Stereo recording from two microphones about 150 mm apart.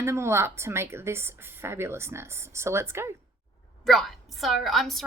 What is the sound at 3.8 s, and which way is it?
A woman's voice, centre (ahead or behind).